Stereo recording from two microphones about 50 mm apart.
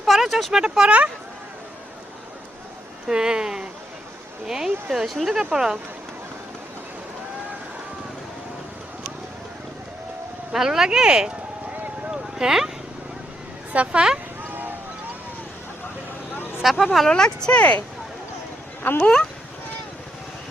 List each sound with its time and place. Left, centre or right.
0.0 s a sound: centre
0.5 s speech: centre
0.9 s speech: right
3.1 s speech: centre
5.4 s speech: centre
10.5 s speech: centre
12.1 s a sound: centre
13.7 s speech: centre
16.3 s vehicle: left
16.6 s speech: centre
17.1 s speech: centre
18.8 s speech: left